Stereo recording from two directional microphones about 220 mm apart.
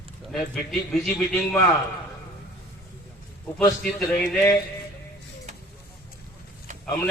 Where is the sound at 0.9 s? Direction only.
5° left (ahead or behind).